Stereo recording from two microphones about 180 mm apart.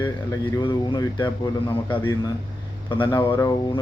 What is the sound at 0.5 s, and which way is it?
Speech, 25° left (ahead or behind).